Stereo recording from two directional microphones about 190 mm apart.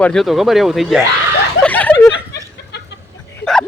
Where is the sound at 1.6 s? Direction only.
5° left (ahead or behind).